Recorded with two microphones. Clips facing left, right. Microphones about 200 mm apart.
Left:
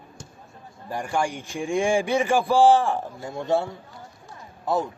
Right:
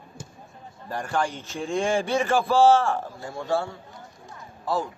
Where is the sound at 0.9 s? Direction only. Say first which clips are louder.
Left 1 dB; 15° left (ahead or behind).